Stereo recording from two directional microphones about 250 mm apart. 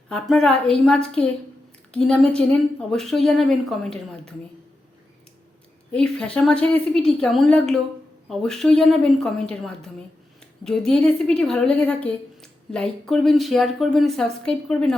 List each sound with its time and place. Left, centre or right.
0.1 s a woman's voice: centre
5.9 s a woman's voice: centre